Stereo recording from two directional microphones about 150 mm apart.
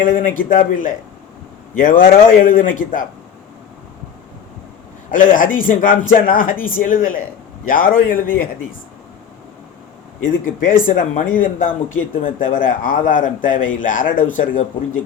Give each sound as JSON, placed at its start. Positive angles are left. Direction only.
{"t": 0.0, "sound": "a man's voice", "side_deg": 65}
{"t": 5.1, "sound": "speech", "side_deg": 65}
{"t": 10.2, "sound": "a man's voice", "side_deg": 65}